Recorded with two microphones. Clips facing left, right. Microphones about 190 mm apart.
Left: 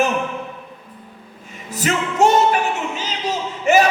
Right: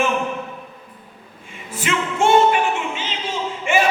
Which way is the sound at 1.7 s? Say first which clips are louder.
Left 3 dB; 40° left (ahead or behind).